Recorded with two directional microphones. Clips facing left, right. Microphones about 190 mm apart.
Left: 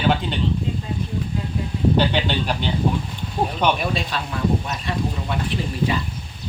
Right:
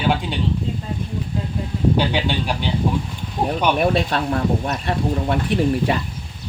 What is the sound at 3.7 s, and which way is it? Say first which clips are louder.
Speech: right 6 dB; 55° right (ahead or behind).